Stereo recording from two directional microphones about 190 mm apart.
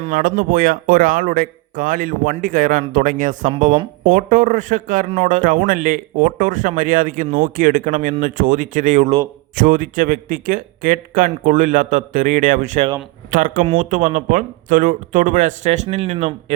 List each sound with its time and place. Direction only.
0.0 s speech: 45° right (ahead or behind)